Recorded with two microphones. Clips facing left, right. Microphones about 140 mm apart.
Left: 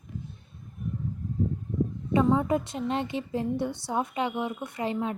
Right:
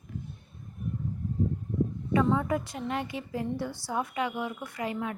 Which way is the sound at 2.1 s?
20° left (ahead or behind).